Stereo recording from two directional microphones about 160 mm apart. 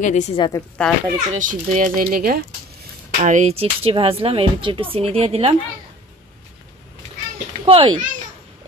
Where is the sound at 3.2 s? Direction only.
50° right (ahead or behind).